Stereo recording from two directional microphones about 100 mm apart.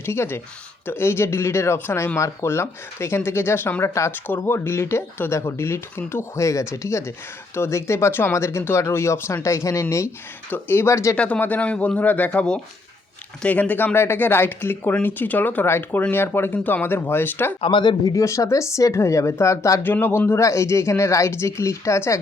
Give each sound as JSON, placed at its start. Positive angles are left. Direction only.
{"t": 0.0, "sound": "speech", "side_deg": 25}
{"t": 11.2, "sound": "speech", "side_deg": 15}
{"t": 17.6, "sound": "speech", "side_deg": 55}
{"t": 18.1, "sound": "a woman's voice", "side_deg": 30}
{"t": 19.8, "sound": "speech", "side_deg": 20}